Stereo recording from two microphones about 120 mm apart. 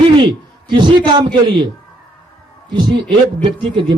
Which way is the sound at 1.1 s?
40° right (ahead or behind).